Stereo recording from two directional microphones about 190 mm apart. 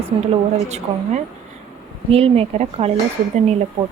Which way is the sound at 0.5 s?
35° right (ahead or behind).